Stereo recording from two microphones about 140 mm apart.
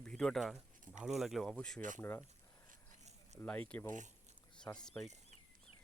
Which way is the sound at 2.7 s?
55° right (ahead or behind).